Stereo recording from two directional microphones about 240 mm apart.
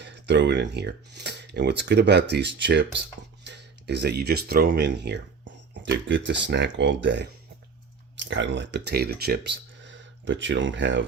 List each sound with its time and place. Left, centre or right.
0.0 s speech: right